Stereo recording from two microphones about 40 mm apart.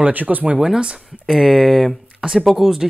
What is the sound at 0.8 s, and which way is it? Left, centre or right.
Speech, right.